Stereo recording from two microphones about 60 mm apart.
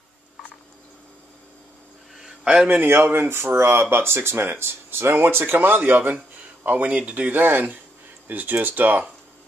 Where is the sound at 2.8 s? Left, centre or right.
Right.